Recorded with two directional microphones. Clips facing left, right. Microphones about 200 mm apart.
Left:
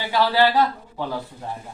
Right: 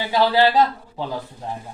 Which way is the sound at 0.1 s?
20° right (ahead or behind).